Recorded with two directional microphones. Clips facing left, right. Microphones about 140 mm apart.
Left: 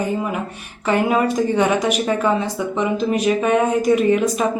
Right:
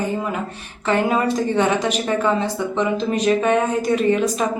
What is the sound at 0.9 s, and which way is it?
A woman's voice, 10° left (ahead or behind).